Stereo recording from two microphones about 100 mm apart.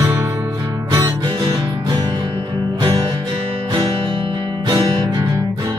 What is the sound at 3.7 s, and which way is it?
Music, 55° right (ahead or behind).